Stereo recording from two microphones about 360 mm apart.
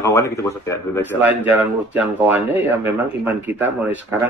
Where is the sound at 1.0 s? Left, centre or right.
Centre.